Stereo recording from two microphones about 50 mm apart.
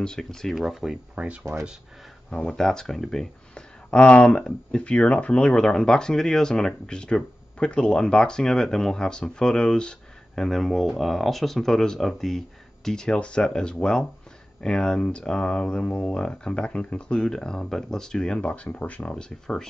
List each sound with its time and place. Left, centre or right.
0.0 s speech: centre
0.6 s speech: centre
1.1 s speech: right
2.3 s speech: centre
3.5 s speech: left
5.5 s speech: centre
10.4 s speech: centre
18.5 s speech: left
19.1 s speech: centre